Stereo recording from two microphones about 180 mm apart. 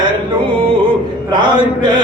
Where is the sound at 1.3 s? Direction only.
25° right (ahead or behind).